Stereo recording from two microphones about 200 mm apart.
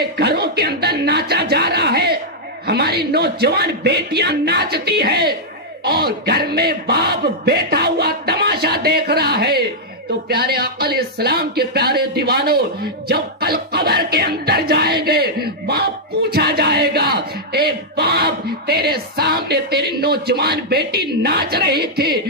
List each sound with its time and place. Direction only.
0.2 s speech: 55° right (ahead or behind)
2.6 s music: 55° right (ahead or behind)
5.9 s speech: 50° right (ahead or behind)
10.2 s music: 50° right (ahead or behind)